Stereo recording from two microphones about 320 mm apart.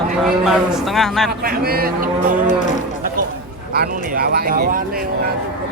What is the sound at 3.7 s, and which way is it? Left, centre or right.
Speech, right.